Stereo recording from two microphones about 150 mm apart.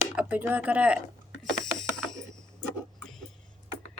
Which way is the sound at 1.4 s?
Centre (ahead or behind).